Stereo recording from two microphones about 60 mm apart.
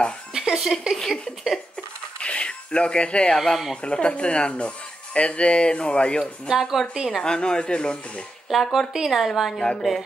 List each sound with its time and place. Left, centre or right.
0.3 s music: centre
0.9 s speech: centre
2.1 s a sound: centre
3.3 s a woman's voice: centre
3.8 s speech: centre
6.4 s a woman's voice: centre
7.2 s speech: centre
8.7 s a woman's voice: centre